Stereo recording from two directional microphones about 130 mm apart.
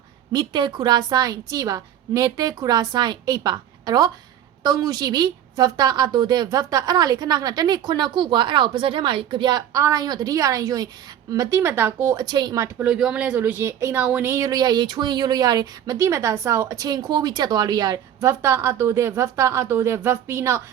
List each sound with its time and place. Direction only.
0.3 s a woman's voice: 35° right (ahead or behind)
12.2 s a woman's voice: 35° right (ahead or behind)
12.6 s speech: 10° right (ahead or behind)